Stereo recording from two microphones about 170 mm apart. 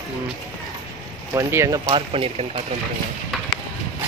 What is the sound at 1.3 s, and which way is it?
Speech, 20° right (ahead or behind).